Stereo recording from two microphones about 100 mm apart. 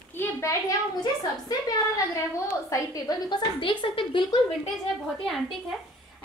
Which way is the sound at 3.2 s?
55° left (ahead or behind).